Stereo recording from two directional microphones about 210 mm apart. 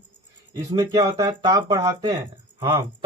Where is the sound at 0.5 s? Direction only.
15° right (ahead or behind).